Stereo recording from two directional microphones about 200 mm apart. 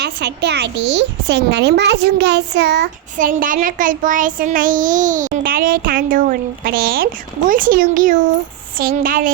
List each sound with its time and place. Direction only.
0.0 s a child's voice: 60° right (ahead or behind)
3.2 s child singing: 45° right (ahead or behind)